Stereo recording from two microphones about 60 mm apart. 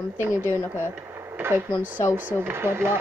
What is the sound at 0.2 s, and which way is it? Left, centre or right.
Speech, right.